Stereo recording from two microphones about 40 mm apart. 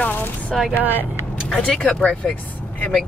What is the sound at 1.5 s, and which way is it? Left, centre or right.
Speech, left.